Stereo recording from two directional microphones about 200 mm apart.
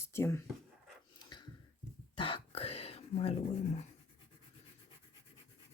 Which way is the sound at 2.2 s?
25° left (ahead or behind).